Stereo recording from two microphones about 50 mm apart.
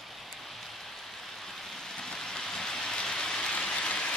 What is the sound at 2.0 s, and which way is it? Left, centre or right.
Rain, centre.